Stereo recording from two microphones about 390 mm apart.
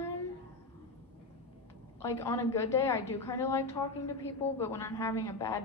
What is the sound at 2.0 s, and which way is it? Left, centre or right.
A woman's voice, centre.